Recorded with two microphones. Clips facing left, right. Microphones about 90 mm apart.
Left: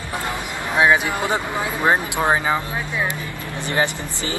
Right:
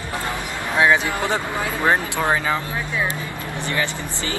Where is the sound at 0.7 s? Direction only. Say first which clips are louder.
Left 1 dB; 20° left (ahead or behind).